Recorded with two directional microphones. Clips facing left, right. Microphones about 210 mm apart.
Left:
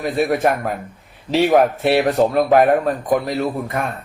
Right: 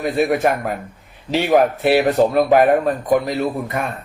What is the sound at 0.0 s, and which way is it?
A man's voice, centre (ahead or behind).